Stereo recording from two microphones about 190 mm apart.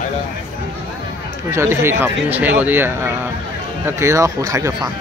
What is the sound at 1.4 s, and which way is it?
Speech, 15° right (ahead or behind).